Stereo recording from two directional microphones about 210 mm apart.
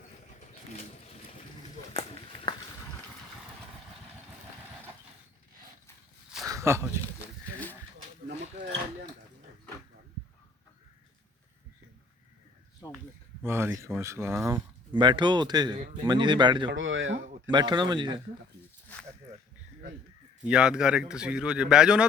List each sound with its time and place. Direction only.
0.3 s pigeon: 35° left (ahead or behind)
1.9 s run: 25° left (ahead or behind)
6.4 s a sound: 15° right (ahead or behind)
12.8 s a sound: 20° left (ahead or behind)
13.4 s speech: 10° right (ahead or behind)
16.7 s speech: 65° right (ahead or behind)
17.5 s speech: 20° right (ahead or behind)
20.4 s speech: 5° right (ahead or behind)